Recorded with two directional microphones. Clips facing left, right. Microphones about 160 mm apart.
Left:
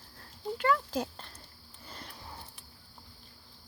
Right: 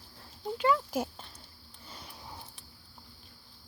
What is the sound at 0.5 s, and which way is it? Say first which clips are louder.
Speech: right 1 dB; 15° right (ahead or behind).